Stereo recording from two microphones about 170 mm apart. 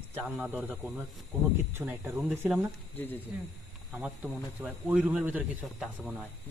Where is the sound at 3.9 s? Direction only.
10° right (ahead or behind).